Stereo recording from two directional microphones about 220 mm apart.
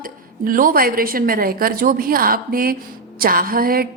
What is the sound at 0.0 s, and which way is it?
A woman's voice, 40° right (ahead or behind).